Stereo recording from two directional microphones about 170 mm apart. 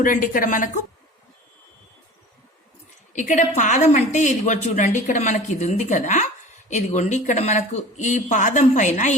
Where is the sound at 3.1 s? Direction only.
45° left (ahead or behind).